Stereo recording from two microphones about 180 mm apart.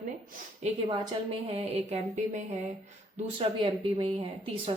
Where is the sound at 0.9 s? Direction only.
30° right (ahead or behind).